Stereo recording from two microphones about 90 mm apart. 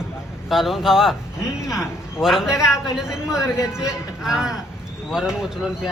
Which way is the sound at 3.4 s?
35° left (ahead or behind).